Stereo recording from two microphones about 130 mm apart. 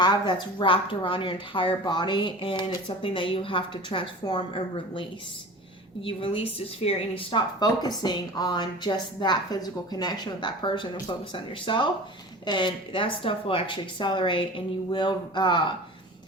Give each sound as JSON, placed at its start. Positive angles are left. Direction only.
{"t": 0.0, "sound": "speech", "side_deg": 35}